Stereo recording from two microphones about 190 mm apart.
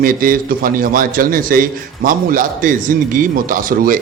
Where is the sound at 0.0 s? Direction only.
45° right (ahead or behind).